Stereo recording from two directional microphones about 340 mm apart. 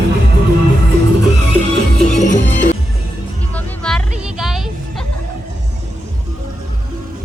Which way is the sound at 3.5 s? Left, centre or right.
Centre.